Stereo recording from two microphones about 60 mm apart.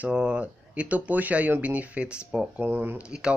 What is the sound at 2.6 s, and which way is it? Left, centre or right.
Speech, right.